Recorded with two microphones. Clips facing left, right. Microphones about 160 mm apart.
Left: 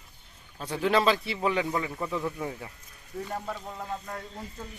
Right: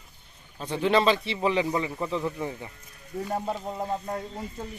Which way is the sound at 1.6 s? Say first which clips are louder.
Right 3 dB; 15° right (ahead or behind).